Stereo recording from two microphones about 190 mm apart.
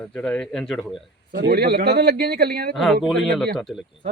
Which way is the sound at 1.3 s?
55° right (ahead or behind).